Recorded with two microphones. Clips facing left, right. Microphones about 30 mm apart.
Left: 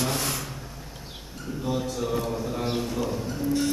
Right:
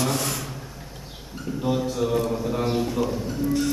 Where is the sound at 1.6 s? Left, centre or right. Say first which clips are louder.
Right 4 dB; centre.